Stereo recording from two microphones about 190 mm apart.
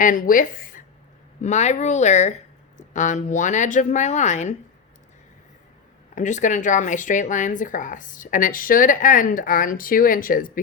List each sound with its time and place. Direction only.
0.0 s speech: 45° left (ahead or behind)
6.1 s speech: 40° left (ahead or behind)